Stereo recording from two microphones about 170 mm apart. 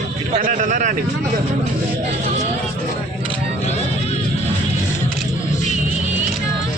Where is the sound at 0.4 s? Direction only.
50° right (ahead or behind).